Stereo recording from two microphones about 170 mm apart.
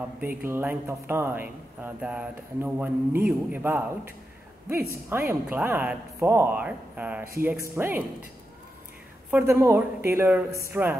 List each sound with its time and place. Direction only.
0.4 s speech: 10° right (ahead or behind)
5.1 s speech: 15° right (ahead or behind)
9.3 s speech: 15° right (ahead or behind)